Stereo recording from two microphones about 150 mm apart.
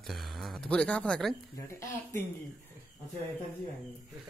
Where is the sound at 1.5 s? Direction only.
20° left (ahead or behind).